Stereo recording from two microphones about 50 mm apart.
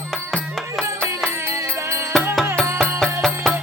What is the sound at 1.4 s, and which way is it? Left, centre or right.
Music, right.